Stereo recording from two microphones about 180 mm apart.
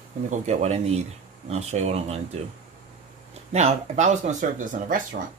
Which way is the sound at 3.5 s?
40° right (ahead or behind).